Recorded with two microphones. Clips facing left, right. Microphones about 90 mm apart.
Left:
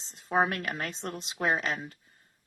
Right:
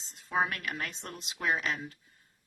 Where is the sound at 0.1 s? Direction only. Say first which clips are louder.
Left 4 dB; 40° left (ahead or behind).